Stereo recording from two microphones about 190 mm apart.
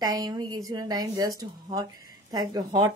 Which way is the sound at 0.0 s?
20° right (ahead or behind).